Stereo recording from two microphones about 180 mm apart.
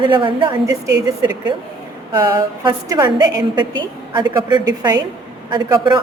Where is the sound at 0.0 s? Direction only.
25° right (ahead or behind).